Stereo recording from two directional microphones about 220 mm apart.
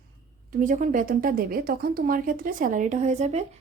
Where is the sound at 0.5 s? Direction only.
35° right (ahead or behind).